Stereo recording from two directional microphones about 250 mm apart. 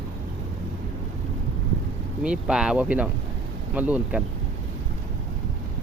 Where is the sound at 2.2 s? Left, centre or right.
Centre.